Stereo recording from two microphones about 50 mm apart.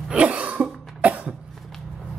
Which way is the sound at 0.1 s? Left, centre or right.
Right.